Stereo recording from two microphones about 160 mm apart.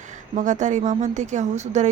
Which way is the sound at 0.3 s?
50° right (ahead or behind).